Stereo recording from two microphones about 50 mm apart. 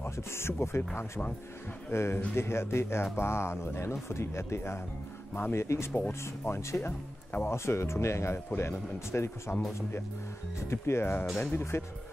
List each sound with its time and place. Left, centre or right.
0.0 s speech: left
1.9 s speech: left
10.7 s speech: left